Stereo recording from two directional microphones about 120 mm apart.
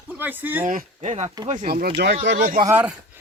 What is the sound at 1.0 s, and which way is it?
Speech, 70° right (ahead or behind).